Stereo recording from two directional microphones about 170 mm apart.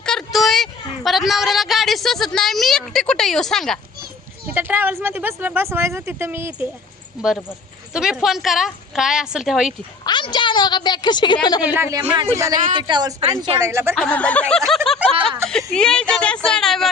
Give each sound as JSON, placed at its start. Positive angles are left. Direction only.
{"t": 0.0, "sound": "a sound", "side_deg": 5}
{"t": 4.5, "sound": "speech", "side_deg": -10}
{"t": 7.2, "sound": "a woman's voice", "side_deg": 0}
{"t": 10.1, "sound": "a woman's voice", "side_deg": 25}
{"t": 11.6, "sound": "a woman's voice", "side_deg": -10}
{"t": 13.9, "sound": "speech", "side_deg": 5}
{"t": 15.1, "sound": "a sound", "side_deg": -30}
{"t": 15.4, "sound": "a woman's voice", "side_deg": 5}